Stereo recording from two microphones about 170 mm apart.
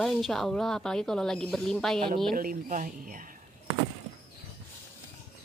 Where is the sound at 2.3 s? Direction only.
55° right (ahead or behind).